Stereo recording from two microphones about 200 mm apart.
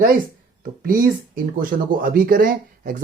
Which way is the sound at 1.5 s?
45° right (ahead or behind).